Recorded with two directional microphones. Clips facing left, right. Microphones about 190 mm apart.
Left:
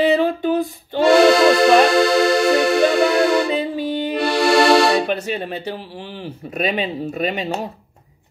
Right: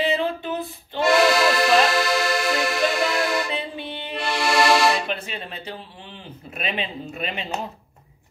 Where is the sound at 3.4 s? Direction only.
40° left (ahead or behind).